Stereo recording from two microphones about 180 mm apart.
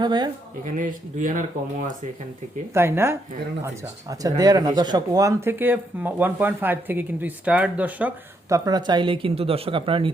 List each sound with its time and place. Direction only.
0.0 s speech: 25° right (ahead or behind)
0.6 s speech: 45° right (ahead or behind)
2.7 s speech: 15° right (ahead or behind); by 10.1 s 30° right (ahead or behind)